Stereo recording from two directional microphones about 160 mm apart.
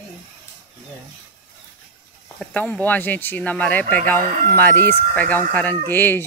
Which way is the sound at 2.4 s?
10° left (ahead or behind).